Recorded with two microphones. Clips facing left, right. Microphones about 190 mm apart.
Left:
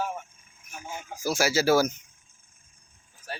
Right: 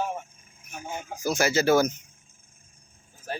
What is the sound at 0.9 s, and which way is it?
Speech, 50° right (ahead or behind).